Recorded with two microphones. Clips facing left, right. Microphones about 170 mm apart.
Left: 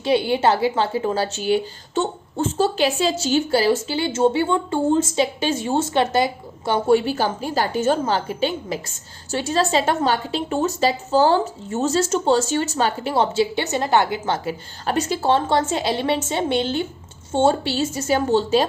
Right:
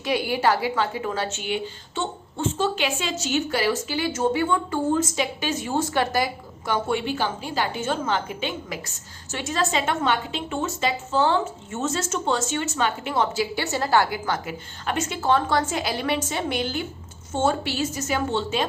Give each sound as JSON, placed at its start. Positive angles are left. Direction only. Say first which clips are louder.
{"t": 0.0, "sound": "a woman's voice", "louder": "left 5 dB", "side_deg": 25}